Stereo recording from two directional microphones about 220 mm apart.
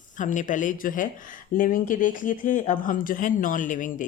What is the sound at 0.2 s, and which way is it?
Speech, 35° left (ahead or behind).